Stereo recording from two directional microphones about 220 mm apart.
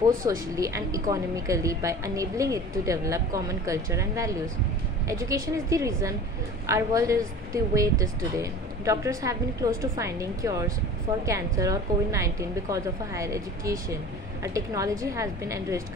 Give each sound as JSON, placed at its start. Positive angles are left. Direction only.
{"t": 0.2, "sound": "a woman's voice", "side_deg": -15}